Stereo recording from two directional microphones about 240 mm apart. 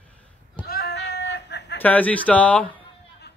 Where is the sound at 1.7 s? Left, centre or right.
Centre.